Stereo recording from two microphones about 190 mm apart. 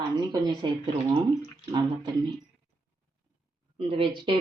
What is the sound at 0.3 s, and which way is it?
Speech, 20° right (ahead or behind).